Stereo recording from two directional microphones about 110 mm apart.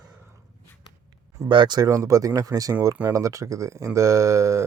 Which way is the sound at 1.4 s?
45° right (ahead or behind).